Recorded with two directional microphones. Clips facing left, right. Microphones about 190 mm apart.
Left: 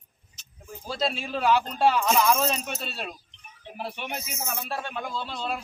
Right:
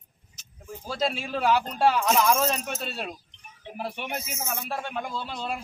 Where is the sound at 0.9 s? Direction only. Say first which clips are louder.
Right 1 dB; 10° right (ahead or behind).